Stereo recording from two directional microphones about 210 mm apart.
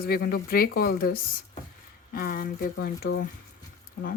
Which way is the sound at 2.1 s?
45° left (ahead or behind).